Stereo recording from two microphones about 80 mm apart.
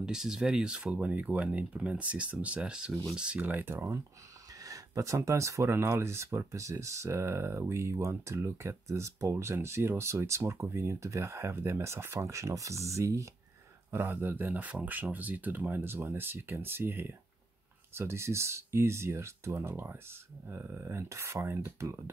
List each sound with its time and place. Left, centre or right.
0.0 s speech: centre; by 4.0 s right
4.6 s speech: right
13.8 s speech: right